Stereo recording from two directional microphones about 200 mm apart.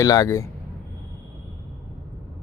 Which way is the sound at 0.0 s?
15° left (ahead or behind).